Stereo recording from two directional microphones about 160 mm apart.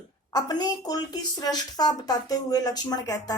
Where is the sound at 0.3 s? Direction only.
25° left (ahead or behind).